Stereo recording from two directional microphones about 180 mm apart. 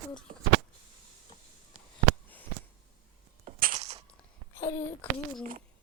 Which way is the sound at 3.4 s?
45° right (ahead or behind).